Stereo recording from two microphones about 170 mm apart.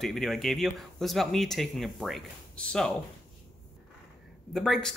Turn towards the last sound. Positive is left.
turn(degrees=0)  # may be behind; listen again after turning